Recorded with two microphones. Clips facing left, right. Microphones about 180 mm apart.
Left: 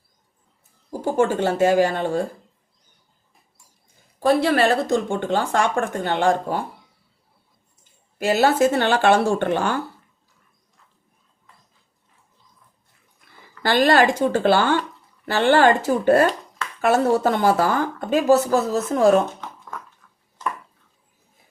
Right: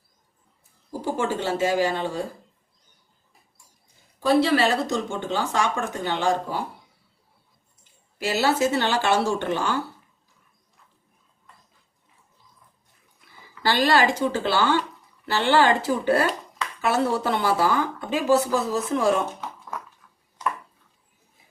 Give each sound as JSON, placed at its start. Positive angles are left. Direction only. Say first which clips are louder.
{"t": 0.9, "sound": "speech", "louder": "left 6 dB", "side_deg": 50}
{"t": 4.2, "sound": "a woman's voice", "louder": "left 2 dB", "side_deg": 55}
{"t": 8.2, "sound": "speech", "louder": "left 5 dB", "side_deg": 50}
{"t": 13.6, "sound": "speech", "louder": "left 4 dB", "side_deg": 50}